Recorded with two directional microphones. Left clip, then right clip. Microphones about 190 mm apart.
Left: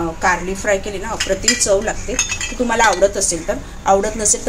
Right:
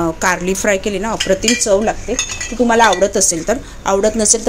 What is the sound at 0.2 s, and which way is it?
Speech, 50° right (ahead or behind).